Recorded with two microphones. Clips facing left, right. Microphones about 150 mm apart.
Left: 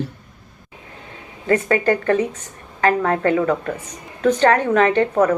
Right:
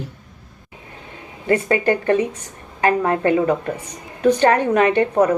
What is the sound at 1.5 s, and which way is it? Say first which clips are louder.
A woman's voice: even; 20° right (ahead or behind).